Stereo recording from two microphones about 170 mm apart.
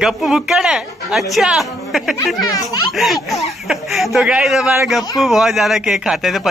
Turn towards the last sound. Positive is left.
turn(degrees=0)  # may be behind; listen again after turning